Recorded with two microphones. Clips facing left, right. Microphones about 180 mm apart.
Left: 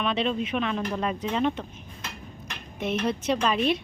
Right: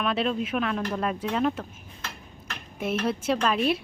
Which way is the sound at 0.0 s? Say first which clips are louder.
Even; 5° right (ahead or behind).